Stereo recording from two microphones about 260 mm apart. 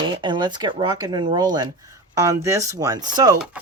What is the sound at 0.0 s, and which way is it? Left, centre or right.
Speech, centre.